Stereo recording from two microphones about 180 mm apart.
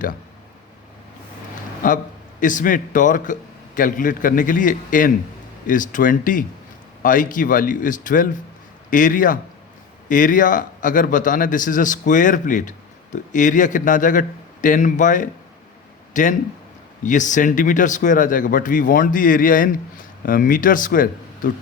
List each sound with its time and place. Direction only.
1.8 s a man's voice: 50° left (ahead or behind)